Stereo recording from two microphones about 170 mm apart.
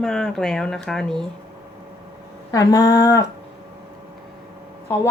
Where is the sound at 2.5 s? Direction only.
20° left (ahead or behind).